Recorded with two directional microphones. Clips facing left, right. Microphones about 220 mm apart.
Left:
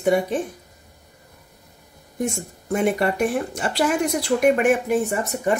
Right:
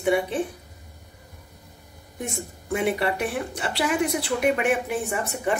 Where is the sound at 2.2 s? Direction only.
45° left (ahead or behind).